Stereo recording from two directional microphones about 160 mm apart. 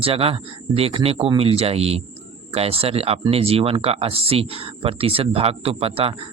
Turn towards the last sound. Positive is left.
turn(degrees=-35)  # may be behind; listen again after turning